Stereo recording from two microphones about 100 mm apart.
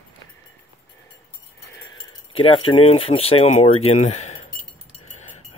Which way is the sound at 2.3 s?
70° left (ahead or behind).